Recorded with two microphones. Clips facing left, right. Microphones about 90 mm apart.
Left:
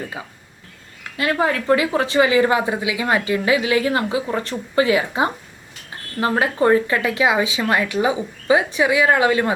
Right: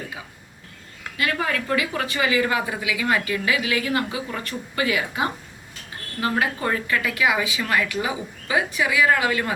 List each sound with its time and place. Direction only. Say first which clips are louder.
1.1 s a woman's voice: left 5 dB; 30° left (ahead or behind)